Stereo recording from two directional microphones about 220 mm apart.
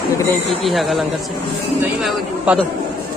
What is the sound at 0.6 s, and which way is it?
Speech, centre (ahead or behind).